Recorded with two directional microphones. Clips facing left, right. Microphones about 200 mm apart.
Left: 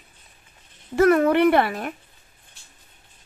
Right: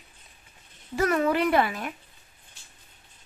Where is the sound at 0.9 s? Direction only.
55° left (ahead or behind).